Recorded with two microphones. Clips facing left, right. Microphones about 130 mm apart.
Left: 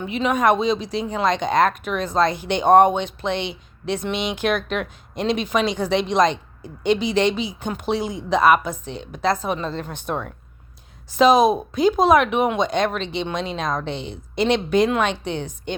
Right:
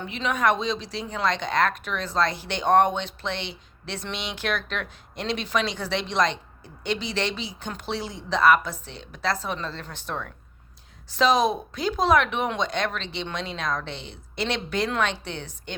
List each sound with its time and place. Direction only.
0.0 s speech: 15° left (ahead or behind)